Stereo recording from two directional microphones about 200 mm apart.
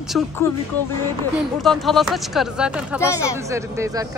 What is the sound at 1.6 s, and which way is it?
Speech, centre (ahead or behind).